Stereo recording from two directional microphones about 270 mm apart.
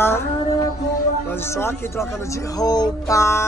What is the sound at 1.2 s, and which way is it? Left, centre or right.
Speech, centre.